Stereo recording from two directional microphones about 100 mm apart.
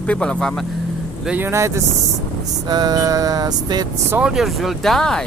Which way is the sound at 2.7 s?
45° right (ahead or behind).